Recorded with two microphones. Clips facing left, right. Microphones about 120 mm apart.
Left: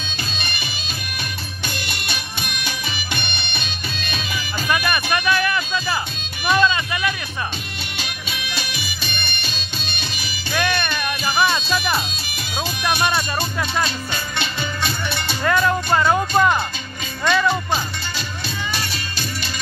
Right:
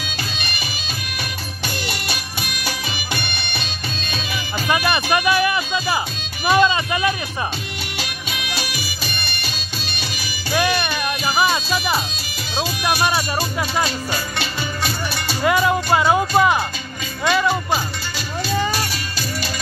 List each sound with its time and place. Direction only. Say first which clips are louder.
0.4 s music: right 1 dB; 25° left (ahead or behind)
2.1 s music: even; 25° left (ahead or behind)
4.6 s music: right 2 dB; 25° right (ahead or behind)
6.4 s speech: right 2 dB; 25° right (ahead or behind)
8.0 s music: right 1 dB; 25° left (ahead or behind)
10.5 s music: right 2 dB; 10° right (ahead or behind)
13.0 s speech: right 1 dB; 5° right (ahead or behind)
14.1 s music: right 1 dB; 25° left (ahead or behind)
15.4 s speech: right 2 dB; 10° right (ahead or behind)